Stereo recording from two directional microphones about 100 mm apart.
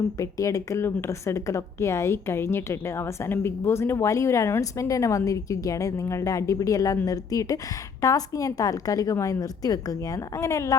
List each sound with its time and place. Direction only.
0.2 s a woman's voice: 35° left (ahead or behind)